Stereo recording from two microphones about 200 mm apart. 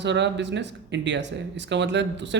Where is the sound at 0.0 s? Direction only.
60° right (ahead or behind).